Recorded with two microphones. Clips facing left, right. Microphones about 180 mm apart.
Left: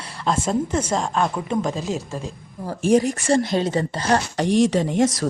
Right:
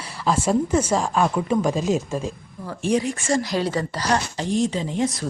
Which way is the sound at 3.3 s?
25° left (ahead or behind).